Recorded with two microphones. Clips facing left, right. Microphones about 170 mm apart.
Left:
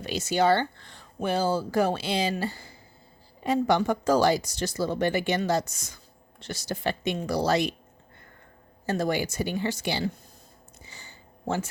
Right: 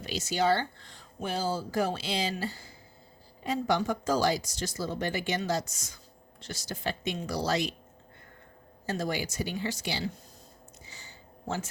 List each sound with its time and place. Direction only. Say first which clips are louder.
0.0 s speech: left 4 dB; 60° left (ahead or behind)
8.9 s speech: left 5 dB; 55° left (ahead or behind)
10.8 s a sound: left 4 dB; 55° left (ahead or behind)